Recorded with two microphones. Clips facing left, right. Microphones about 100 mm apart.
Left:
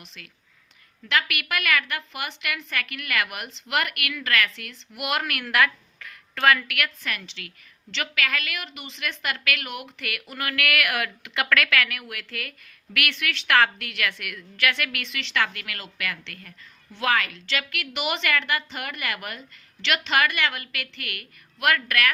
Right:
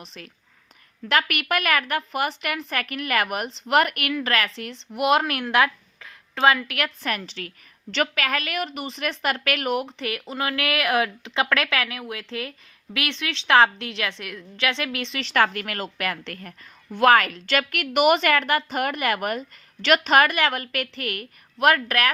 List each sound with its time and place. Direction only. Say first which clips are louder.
0.0 s a woman's voice: right 6 dB; 35° right (ahead or behind)
6.7 s a woman's voice: right 3 dB; 35° right (ahead or behind)